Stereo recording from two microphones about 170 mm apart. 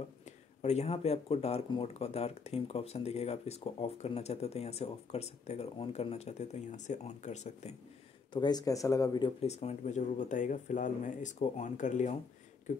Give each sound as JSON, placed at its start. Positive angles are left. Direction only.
{"t": 0.2, "sound": "speech", "side_deg": 40}
{"t": 8.3, "sound": "speech", "side_deg": 25}
{"t": 9.4, "sound": "speech", "side_deg": 40}